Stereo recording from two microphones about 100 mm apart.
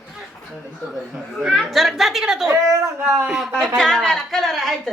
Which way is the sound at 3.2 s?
5° right (ahead or behind).